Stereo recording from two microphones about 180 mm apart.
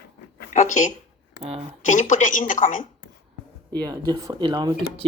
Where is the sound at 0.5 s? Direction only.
40° left (ahead or behind).